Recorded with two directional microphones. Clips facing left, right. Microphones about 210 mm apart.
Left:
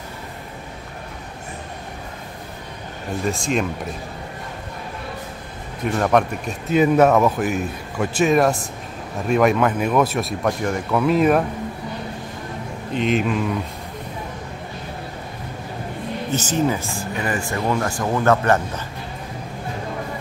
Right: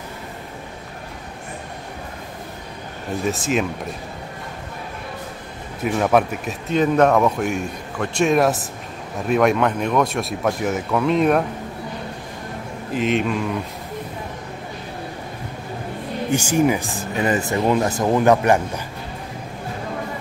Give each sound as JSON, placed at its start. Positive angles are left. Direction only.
{"t": 3.3, "sound": "speech", "side_deg": -5}
{"t": 5.9, "sound": "speech", "side_deg": -5}
{"t": 6.7, "sound": "speech", "side_deg": 5}
{"t": 12.9, "sound": "speech", "side_deg": 0}
{"t": 16.3, "sound": "speech", "side_deg": -10}